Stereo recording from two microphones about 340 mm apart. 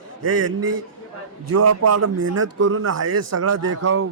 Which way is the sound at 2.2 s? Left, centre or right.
Right.